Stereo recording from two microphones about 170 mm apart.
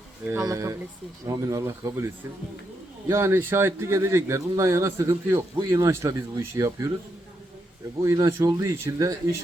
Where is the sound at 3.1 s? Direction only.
15° right (ahead or behind).